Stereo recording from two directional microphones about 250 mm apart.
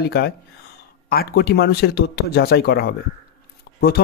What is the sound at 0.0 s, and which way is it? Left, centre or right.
Speech, left.